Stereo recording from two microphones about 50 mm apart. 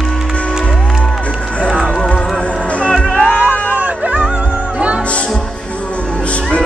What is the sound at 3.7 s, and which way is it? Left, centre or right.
Music, right.